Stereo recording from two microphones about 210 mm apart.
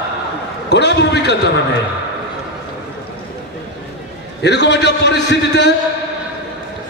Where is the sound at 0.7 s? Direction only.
55° left (ahead or behind).